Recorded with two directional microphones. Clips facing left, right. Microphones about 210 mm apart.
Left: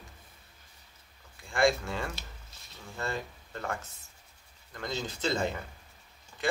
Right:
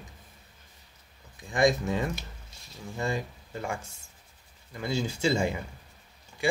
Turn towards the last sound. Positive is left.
turn(degrees=-10)  # may be behind; listen again after turning